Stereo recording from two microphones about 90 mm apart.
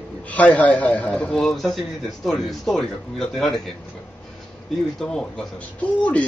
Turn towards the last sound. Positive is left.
turn(degrees=15)  # may be behind; listen again after turning